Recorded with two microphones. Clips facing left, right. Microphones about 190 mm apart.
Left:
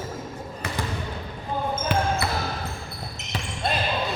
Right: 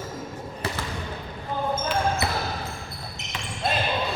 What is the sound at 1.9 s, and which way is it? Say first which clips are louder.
Basketball bounce: left 5 dB; 60° left (ahead or behind).